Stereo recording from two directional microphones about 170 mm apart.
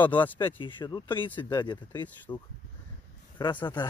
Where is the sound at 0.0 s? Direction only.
10° left (ahead or behind).